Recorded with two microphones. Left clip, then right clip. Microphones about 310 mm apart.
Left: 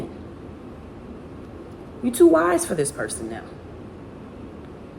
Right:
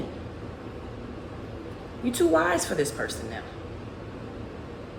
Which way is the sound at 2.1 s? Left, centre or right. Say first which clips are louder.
Left 6 dB; centre.